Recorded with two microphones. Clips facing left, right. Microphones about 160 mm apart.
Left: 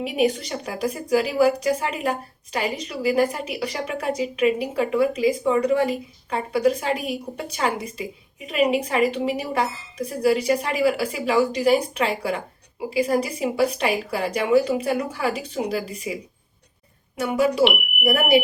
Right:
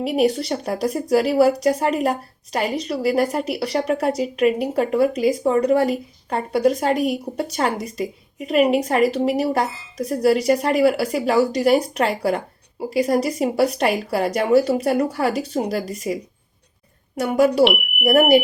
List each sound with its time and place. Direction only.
0.0 s a woman's voice: 35° right (ahead or behind)
17.2 s a woman's voice: 40° right (ahead or behind)
17.6 s speech: centre (ahead or behind)
18.0 s a woman's voice: 40° right (ahead or behind)